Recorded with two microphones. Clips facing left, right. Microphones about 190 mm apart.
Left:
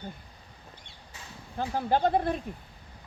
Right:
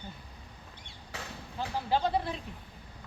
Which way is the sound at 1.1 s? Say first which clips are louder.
Right 7 dB; 75° right (ahead or behind).